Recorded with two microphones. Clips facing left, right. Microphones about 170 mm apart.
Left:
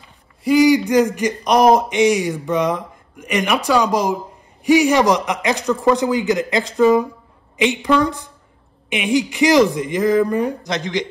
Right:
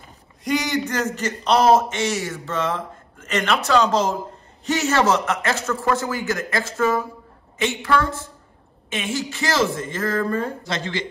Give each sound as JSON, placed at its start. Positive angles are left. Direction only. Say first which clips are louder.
{"t": 0.4, "sound": "speech", "louder": "left 10 dB", "side_deg": 5}